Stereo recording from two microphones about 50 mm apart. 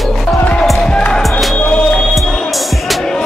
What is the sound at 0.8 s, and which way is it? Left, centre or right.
Music, centre.